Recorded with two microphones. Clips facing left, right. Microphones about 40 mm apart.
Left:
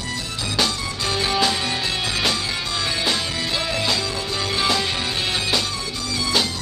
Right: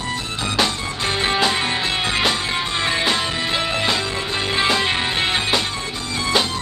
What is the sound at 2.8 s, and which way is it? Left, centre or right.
Music, right.